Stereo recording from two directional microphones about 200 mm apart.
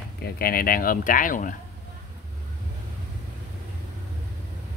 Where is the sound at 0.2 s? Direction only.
50° left (ahead or behind).